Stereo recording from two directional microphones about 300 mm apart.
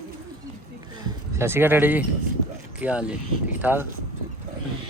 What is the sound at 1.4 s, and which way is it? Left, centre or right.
Speech, centre.